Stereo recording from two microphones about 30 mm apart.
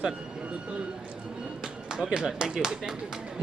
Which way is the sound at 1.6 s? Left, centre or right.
Right.